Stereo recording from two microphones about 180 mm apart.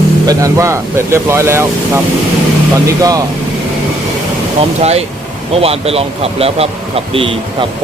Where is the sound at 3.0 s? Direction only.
20° right (ahead or behind).